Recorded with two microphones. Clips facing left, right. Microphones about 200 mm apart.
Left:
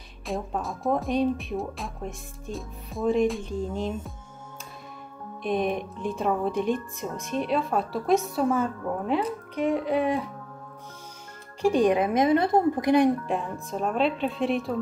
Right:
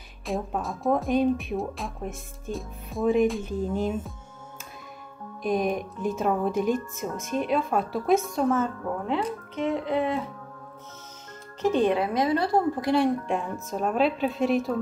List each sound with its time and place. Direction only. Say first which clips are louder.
0.3 s speech: right 1 dB; centre (ahead or behind)
5.4 s speech: right 1 dB; centre (ahead or behind)
11.6 s a woman's voice: left 2 dB; 15° left (ahead or behind)
13.3 s speech: right 1 dB; centre (ahead or behind)